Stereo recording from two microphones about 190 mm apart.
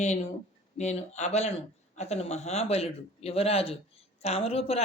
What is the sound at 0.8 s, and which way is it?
Speech, 35° left (ahead or behind).